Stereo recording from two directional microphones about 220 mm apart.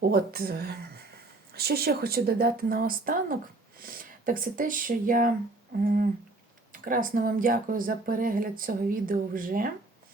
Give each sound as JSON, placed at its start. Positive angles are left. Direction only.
{"t": 0.1, "sound": "speech", "side_deg": -45}
{"t": 6.7, "sound": "speech", "side_deg": -40}